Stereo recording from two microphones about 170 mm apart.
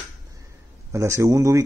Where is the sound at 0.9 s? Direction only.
15° right (ahead or behind).